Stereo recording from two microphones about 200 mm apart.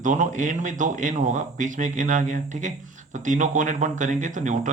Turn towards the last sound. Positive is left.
turn(degrees=-40)  # may be behind; listen again after turning